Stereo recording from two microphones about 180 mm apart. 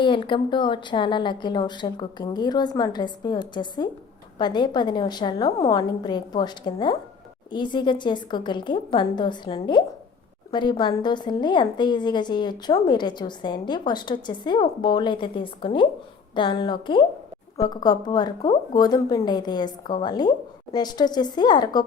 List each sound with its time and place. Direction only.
0.0 s a woman's voice: 25° left (ahead or behind)